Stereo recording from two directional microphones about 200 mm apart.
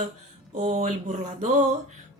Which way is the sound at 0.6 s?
35° right (ahead or behind).